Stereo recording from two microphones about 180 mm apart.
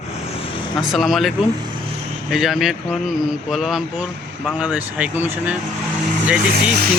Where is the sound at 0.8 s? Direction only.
Centre (ahead or behind).